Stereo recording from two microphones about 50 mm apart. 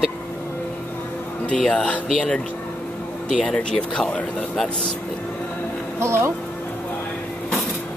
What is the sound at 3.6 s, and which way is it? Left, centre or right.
Speech, centre.